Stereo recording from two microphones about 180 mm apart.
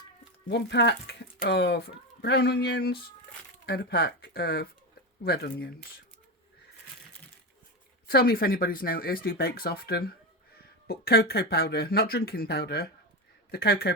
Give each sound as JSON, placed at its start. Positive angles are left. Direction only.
{"t": 0.5, "sound": "speech", "side_deg": 75}
{"t": 8.0, "sound": "speech", "side_deg": 60}